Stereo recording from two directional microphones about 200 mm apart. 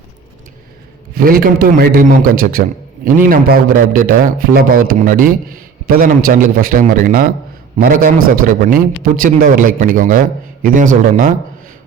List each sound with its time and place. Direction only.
1.2 s a man's voice: 45° right (ahead or behind)